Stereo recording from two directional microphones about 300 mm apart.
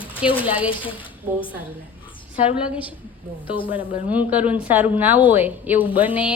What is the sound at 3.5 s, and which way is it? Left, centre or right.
Speech, centre.